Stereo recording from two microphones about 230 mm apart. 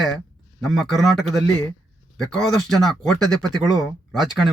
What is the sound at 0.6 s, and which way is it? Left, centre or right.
Speech, centre.